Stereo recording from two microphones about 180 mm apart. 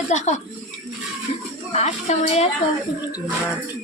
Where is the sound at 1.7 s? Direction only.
40° left (ahead or behind).